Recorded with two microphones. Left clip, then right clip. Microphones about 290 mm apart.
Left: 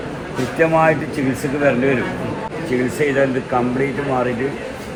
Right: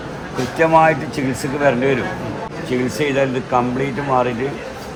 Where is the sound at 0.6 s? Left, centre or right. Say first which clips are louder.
Right 2 dB; right.